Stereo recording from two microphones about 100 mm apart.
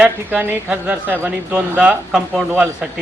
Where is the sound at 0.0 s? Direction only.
20° right (ahead or behind).